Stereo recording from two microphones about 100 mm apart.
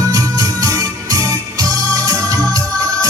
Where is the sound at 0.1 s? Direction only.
40° right (ahead or behind).